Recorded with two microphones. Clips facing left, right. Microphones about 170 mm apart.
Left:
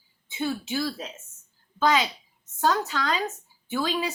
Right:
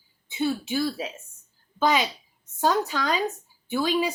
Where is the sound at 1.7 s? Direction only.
20° right (ahead or behind).